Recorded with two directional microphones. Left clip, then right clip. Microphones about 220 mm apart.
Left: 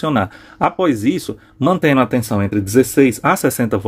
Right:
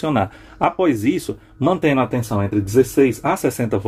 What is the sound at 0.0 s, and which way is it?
Speech, 20° left (ahead or behind).